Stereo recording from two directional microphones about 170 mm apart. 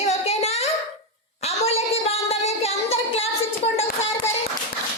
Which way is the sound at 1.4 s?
40° left (ahead or behind).